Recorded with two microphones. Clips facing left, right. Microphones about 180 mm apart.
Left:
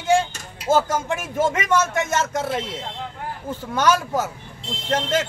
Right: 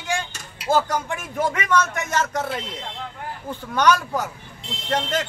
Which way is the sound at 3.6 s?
5° left (ahead or behind).